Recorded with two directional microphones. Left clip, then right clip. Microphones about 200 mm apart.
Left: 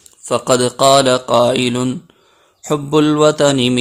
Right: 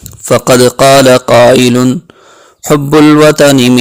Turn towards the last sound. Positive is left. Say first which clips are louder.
# right 7 dB
turn(degrees=-35)  # may be behind; listen again after turning